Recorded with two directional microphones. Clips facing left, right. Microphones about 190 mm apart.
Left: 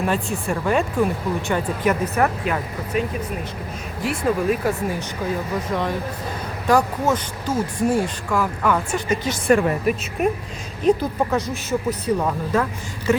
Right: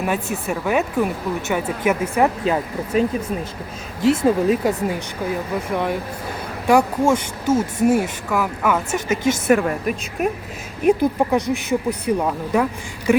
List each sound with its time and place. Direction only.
0.4 s speech: 5° right (ahead or behind)
2.4 s speech: 30° right (ahead or behind)
4.0 s speech: 25° right (ahead or behind); by 10.2 s centre (ahead or behind)
10.8 s speech: 15° right (ahead or behind)
13.1 s a sound: 15° right (ahead or behind)